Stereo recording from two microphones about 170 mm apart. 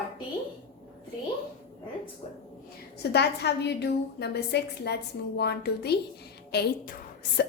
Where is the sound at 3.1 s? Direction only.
75° left (ahead or behind).